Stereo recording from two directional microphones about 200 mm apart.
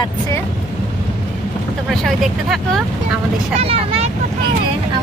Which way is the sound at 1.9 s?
Centre (ahead or behind).